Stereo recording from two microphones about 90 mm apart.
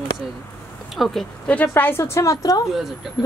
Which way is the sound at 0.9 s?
Centre (ahead or behind).